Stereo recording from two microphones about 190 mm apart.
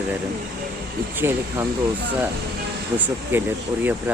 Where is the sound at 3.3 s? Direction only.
10° right (ahead or behind).